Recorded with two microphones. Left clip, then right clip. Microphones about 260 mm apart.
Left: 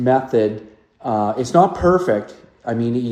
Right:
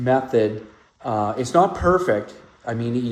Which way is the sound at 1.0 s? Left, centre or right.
Left.